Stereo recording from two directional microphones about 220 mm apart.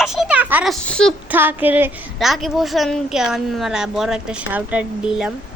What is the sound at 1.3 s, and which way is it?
A woman's voice, 10° right (ahead or behind).